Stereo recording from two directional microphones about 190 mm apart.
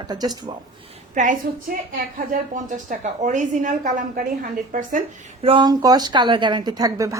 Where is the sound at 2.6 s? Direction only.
40° right (ahead or behind).